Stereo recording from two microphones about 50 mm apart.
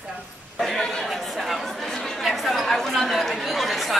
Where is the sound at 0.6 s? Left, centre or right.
Centre.